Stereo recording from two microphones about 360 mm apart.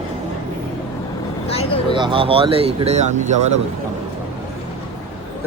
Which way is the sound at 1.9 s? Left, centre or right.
Centre.